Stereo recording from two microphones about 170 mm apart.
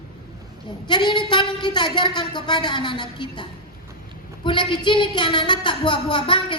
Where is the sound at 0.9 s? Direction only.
25° left (ahead or behind).